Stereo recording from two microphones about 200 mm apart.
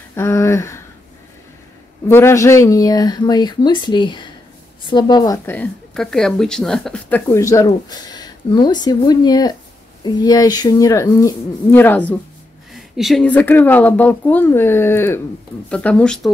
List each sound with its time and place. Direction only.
0.1 s speech: 15° left (ahead or behind)
2.0 s a woman's voice: 10° left (ahead or behind)